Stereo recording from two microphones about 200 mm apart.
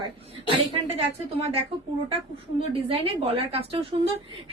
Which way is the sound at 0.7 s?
30° right (ahead or behind).